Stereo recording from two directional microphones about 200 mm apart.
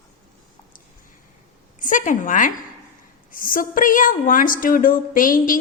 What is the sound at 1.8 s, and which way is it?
A woman's voice, 40° left (ahead or behind).